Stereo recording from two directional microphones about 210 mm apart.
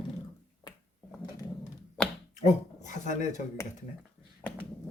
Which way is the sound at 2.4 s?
35° left (ahead or behind).